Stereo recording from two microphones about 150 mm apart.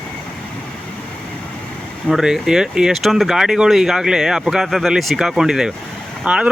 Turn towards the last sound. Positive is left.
turn(degrees=-5)  # may be behind; listen again after turning